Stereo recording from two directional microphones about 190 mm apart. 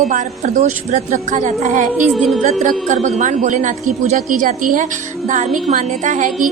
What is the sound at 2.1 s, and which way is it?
Speech, centre (ahead or behind).